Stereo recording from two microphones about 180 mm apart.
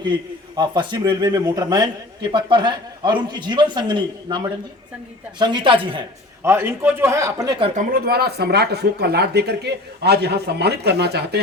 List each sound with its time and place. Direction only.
0.0 s a man's voice: 25° right (ahead or behind)
6.4 s a man's voice: 15° right (ahead or behind)
7.8 s speech: 55° right (ahead or behind)